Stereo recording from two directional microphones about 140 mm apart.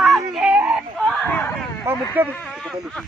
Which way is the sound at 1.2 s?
10° left (ahead or behind).